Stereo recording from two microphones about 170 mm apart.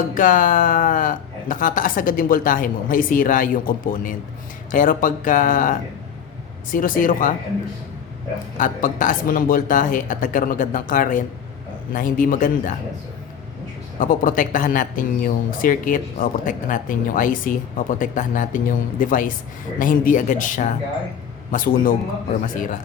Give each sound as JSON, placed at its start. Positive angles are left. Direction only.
{"t": 0.1, "sound": "speech", "side_deg": 50}
{"t": 8.5, "sound": "speech", "side_deg": 50}
{"t": 14.0, "sound": "speech", "side_deg": 55}